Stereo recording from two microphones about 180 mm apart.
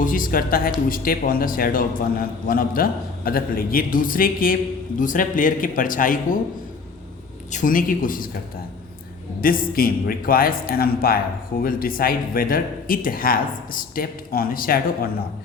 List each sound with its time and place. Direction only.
0.0 s a man's voice: 50° left (ahead or behind)
7.5 s a man's voice: 50° left (ahead or behind)
9.4 s a man's voice: 55° left (ahead or behind)